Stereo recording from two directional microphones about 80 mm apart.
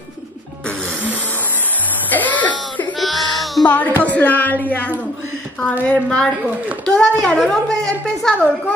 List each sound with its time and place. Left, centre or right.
2.0 s music: left
3.0 s a sound: centre
3.6 s speech: left
5.9 s a woman's voice: centre